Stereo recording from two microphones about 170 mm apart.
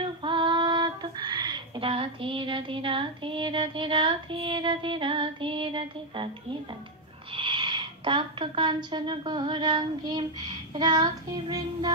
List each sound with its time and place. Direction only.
0.0 s child singing: 30° right (ahead or behind)
7.3 s a woman's voice: 30° right (ahead or behind)